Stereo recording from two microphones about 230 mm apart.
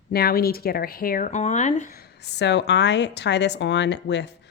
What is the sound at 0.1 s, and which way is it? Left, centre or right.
Speech, left.